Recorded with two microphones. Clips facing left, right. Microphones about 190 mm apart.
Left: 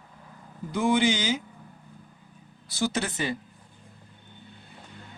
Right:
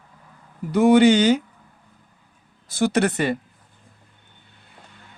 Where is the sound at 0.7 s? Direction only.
65° right (ahead or behind).